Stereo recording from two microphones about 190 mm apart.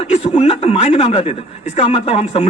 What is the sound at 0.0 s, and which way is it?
A man's voice, 30° left (ahead or behind).